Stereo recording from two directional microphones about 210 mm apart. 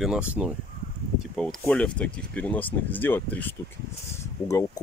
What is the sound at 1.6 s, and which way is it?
Speech, 5° left (ahead or behind).